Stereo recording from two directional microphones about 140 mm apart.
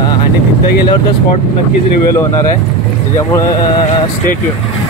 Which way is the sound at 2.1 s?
20° left (ahead or behind).